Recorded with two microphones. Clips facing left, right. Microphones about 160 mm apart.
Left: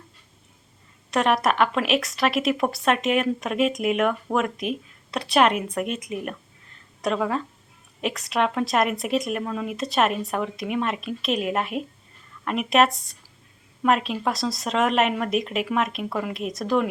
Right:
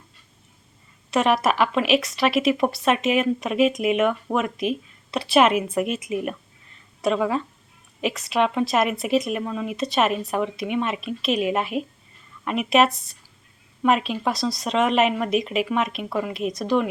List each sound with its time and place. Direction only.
1.1 s a woman's voice: centre (ahead or behind)